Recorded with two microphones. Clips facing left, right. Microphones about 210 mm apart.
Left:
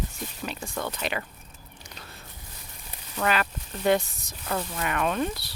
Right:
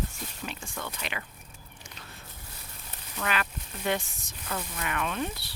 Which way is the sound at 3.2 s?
40° left (ahead or behind).